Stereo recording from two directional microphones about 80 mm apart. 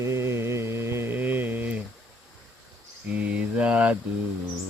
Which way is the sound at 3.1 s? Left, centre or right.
Centre.